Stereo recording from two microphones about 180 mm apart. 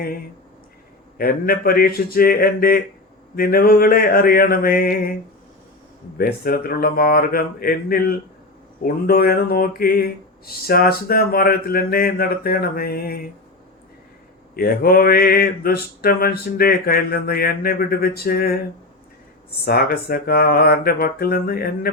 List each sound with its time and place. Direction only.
1.2 s speech: 55° left (ahead or behind)
6.1 s speech: 55° left (ahead or behind)
14.5 s speech: 55° left (ahead or behind)
19.6 s speech: 55° left (ahead or behind)